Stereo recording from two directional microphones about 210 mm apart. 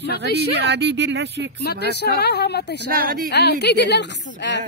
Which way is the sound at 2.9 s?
45° right (ahead or behind).